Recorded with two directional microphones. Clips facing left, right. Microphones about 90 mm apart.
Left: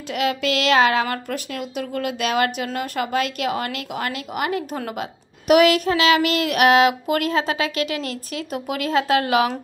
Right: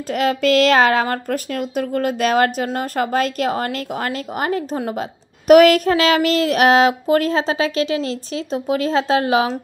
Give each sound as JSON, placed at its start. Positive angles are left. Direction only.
{"t": 0.1, "sound": "speech", "side_deg": -40}